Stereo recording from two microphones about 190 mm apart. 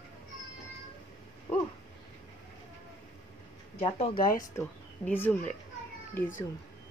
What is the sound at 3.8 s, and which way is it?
Speech, 30° left (ahead or behind).